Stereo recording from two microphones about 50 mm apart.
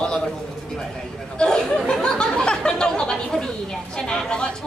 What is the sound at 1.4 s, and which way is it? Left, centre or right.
Speech, centre.